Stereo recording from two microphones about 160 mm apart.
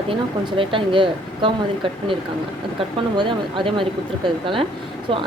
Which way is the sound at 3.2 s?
30° right (ahead or behind).